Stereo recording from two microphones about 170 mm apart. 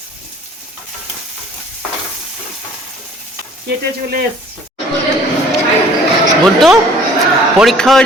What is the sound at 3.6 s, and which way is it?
Speech, 70° right (ahead or behind).